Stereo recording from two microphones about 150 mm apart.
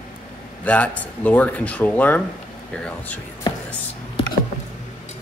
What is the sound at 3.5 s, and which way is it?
Music, 30° left (ahead or behind).